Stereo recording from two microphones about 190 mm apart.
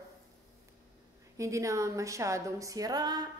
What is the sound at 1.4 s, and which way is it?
A woman's voice, 15° right (ahead or behind).